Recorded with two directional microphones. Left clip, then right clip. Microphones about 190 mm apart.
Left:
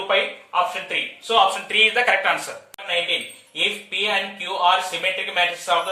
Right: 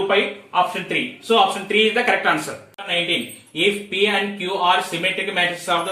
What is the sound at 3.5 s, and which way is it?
A man's voice, 20° left (ahead or behind).